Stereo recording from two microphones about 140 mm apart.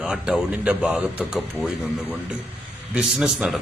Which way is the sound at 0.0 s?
5° right (ahead or behind).